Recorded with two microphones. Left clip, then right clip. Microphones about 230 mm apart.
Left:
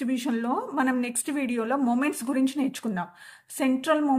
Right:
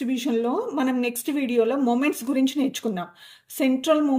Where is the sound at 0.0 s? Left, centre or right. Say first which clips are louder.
Right 4 dB; left.